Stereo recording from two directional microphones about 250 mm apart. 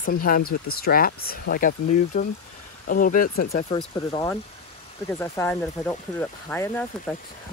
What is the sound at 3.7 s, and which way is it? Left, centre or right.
Speech, left.